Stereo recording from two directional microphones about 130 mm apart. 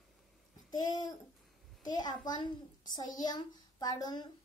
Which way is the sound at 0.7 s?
30° left (ahead or behind).